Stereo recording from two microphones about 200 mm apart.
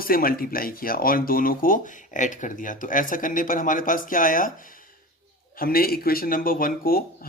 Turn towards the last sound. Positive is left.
turn(degrees=45)  # may be behind; listen again after turning